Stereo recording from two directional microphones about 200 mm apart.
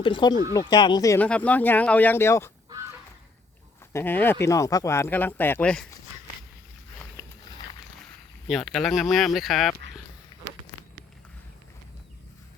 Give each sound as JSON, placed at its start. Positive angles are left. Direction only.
{"t": 0.0, "sound": "speech", "side_deg": 25}
{"t": 3.9, "sound": "speech", "side_deg": 10}
{"t": 8.4, "sound": "speech", "side_deg": 0}